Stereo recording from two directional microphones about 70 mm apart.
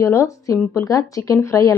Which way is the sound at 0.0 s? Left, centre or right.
Left.